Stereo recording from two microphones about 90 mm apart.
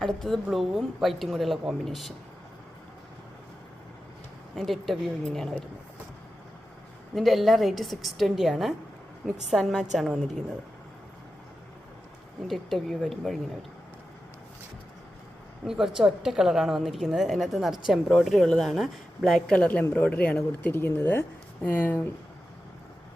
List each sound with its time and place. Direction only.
0.0 s a woman's voice: 5° left (ahead or behind)
4.5 s a woman's voice: centre (ahead or behind)
7.2 s a woman's voice: centre (ahead or behind)
12.5 s a woman's voice: centre (ahead or behind)
15.6 s a woman's voice: 5° right (ahead or behind)
19.5 s a woman's voice: 15° left (ahead or behind)